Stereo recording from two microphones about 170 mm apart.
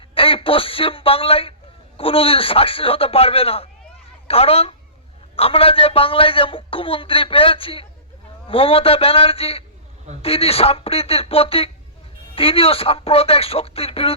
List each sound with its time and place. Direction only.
0.1 s a man's voice: 35° left (ahead or behind)